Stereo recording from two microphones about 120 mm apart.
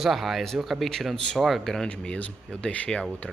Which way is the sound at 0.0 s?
Centre (ahead or behind).